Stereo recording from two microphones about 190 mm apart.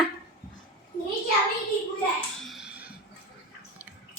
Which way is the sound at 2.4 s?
Centre (ahead or behind).